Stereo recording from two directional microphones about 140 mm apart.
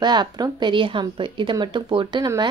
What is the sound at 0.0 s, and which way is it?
Speech, 30° right (ahead or behind).